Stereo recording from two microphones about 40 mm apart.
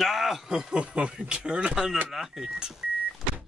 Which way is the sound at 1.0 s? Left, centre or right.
Right.